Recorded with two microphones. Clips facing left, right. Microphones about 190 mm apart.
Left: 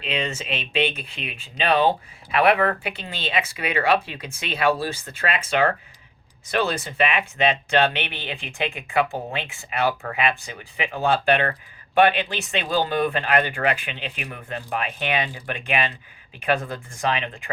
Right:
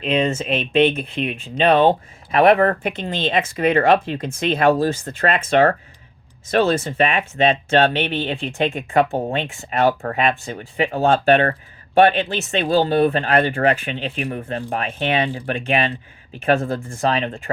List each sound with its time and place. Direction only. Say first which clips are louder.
0.0 s speech: right 8 dB; 50° right (ahead or behind)